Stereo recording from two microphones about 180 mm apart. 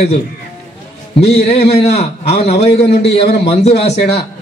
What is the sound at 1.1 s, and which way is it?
Speech, 35° left (ahead or behind).